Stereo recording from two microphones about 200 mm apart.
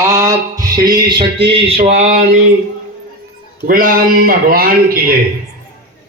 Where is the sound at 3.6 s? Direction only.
45° right (ahead or behind).